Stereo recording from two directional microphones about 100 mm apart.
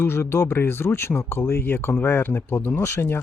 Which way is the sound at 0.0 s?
25° left (ahead or behind).